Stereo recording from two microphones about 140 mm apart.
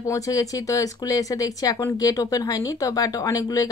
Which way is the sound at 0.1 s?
25° left (ahead or behind).